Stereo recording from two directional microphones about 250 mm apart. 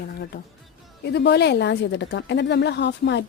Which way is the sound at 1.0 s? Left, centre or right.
Left.